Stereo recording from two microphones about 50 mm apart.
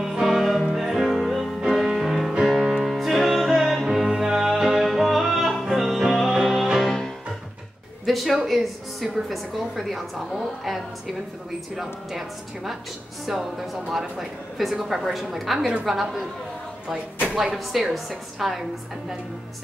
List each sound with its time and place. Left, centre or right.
0.0 s music: centre
8.5 s a woman's voice: centre
16.9 s speech: centre
17.6 s a woman's voice: centre